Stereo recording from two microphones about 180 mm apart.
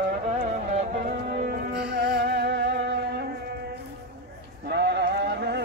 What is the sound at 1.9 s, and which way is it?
Music, 65° right (ahead or behind).